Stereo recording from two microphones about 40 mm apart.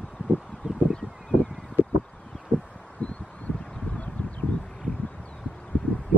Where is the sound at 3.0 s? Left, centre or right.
Left.